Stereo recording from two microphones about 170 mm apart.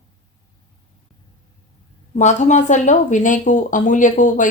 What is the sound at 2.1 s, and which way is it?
A woman's voice, 45° left (ahead or behind).